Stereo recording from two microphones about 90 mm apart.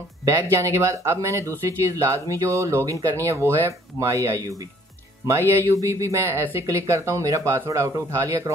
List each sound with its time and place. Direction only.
0.2 s speech: 35° right (ahead or behind)